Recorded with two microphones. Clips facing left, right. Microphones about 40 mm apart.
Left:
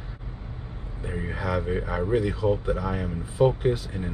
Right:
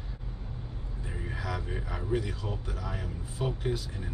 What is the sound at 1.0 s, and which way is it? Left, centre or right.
Speech, left.